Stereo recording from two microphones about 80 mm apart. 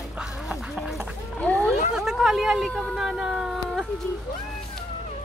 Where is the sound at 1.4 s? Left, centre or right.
Centre.